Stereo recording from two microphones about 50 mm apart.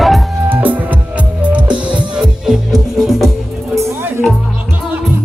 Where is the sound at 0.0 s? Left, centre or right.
Centre.